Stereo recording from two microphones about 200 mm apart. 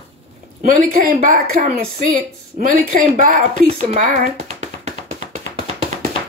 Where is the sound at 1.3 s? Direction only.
45° right (ahead or behind).